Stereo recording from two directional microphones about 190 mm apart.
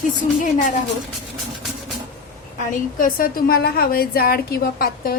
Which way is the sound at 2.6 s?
45° left (ahead or behind).